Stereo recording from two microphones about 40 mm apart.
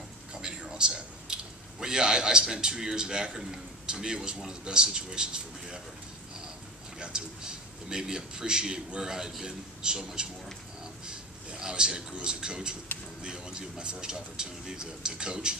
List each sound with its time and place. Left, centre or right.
0.3 s a man's voice: centre
7.0 s a man's voice: right